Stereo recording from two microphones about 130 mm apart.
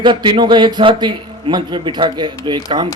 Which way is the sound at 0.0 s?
35° right (ahead or behind).